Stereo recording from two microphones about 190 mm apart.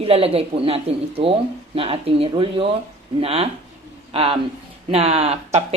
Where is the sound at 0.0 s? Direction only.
30° right (ahead or behind).